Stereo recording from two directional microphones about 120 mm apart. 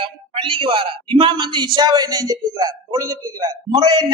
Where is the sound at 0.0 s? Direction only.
45° right (ahead or behind).